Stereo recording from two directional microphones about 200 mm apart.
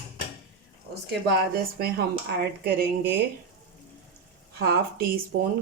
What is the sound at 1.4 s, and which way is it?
Speech, 50° right (ahead or behind).